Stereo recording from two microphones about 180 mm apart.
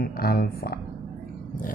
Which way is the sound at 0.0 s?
55° left (ahead or behind).